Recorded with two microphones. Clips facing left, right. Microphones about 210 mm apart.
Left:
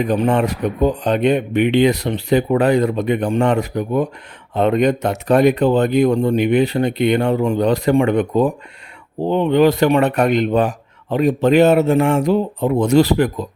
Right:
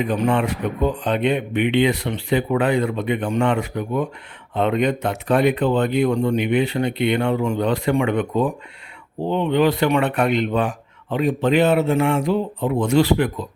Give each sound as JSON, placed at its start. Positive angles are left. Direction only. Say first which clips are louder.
{"t": 0.0, "sound": "speech", "louder": "left 3 dB", "side_deg": 40}